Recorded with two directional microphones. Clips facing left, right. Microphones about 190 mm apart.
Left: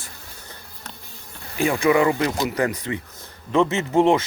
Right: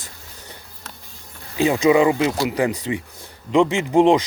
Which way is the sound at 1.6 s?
20° right (ahead or behind).